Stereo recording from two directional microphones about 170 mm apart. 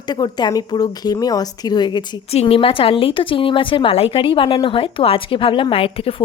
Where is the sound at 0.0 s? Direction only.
25° left (ahead or behind).